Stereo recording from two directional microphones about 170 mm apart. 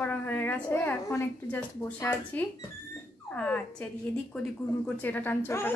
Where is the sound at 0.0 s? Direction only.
10° left (ahead or behind).